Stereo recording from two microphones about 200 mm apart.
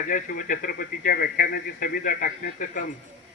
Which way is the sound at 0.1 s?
40° left (ahead or behind).